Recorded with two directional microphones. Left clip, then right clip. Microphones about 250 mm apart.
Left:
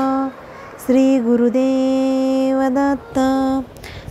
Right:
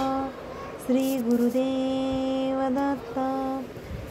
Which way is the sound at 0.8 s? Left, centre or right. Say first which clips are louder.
Left 11 dB; left.